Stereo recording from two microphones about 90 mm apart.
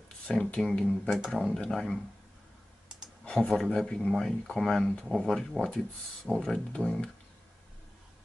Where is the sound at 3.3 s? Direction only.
10° left (ahead or behind).